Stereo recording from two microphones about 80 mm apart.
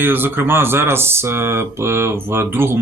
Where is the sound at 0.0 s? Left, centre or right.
Right.